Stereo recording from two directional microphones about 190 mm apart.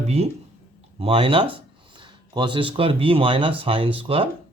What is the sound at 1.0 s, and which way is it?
Speech, 30° right (ahead or behind).